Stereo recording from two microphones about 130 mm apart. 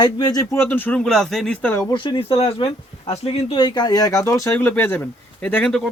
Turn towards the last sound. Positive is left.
turn(degrees=5)  # may be behind; listen again after turning